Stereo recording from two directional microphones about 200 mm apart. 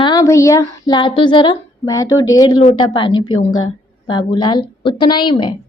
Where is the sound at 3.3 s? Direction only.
90° left.